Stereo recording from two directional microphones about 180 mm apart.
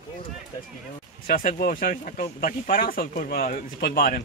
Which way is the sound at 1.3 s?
55° left (ahead or behind).